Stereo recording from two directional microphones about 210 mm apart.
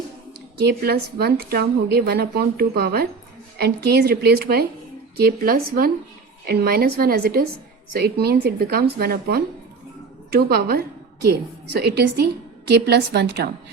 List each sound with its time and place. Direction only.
0.6 s speech: 50° right (ahead or behind)